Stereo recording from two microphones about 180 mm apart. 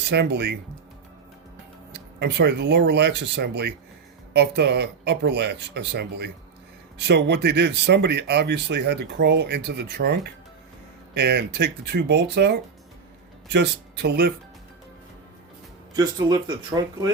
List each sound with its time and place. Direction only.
0.1 s speech: 70° right (ahead or behind)
1.9 s speech: 70° right (ahead or behind)
16.0 s speech: 20° right (ahead or behind)